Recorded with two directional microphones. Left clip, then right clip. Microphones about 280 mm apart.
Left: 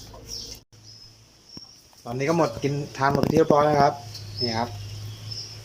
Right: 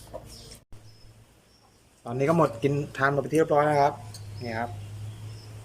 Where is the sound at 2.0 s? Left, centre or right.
Centre.